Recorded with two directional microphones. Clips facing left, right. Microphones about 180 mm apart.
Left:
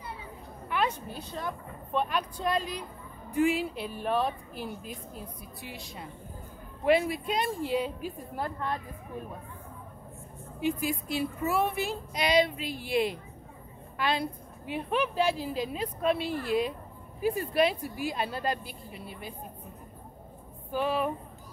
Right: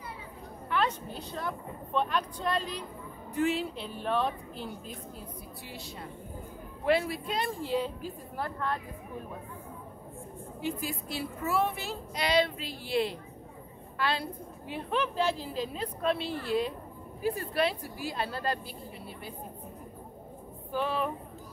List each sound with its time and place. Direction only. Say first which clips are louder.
0.7 s a woman's voice: even; 10° left (ahead or behind)
10.6 s a woman's voice: left 5 dB; 15° left (ahead or behind)
20.7 s a woman's voice: left 2 dB; 10° left (ahead or behind)